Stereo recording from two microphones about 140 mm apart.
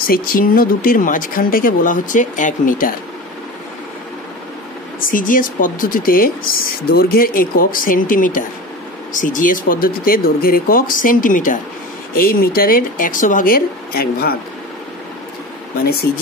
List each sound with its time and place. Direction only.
0.0 s speech: 90° left; by 2.9 s 70° left (ahead or behind)
5.0 s speech: 80° left
12.1 s speech: 90° left
15.8 s speech: 90° left